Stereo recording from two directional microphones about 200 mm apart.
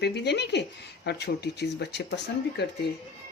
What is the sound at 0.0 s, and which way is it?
Speech, 55° left (ahead or behind).